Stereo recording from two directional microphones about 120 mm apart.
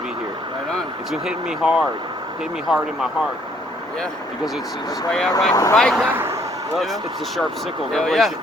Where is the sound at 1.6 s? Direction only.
5° right (ahead or behind).